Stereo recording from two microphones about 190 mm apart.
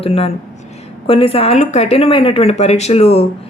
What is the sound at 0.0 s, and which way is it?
A woman's voice, 30° left (ahead or behind).